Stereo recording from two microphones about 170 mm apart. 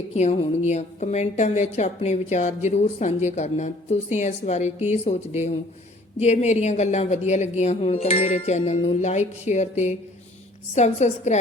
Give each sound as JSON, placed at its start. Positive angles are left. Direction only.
{"t": 0.1, "sound": "a woman's voice", "side_deg": 40}